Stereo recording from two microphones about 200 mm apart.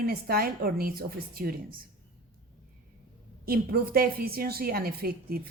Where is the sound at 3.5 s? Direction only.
50° right (ahead or behind).